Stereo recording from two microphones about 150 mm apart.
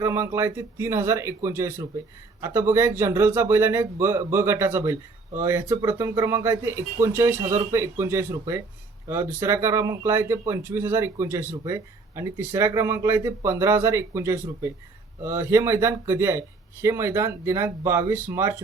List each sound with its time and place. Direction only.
0.0 s speech: 20° right (ahead or behind)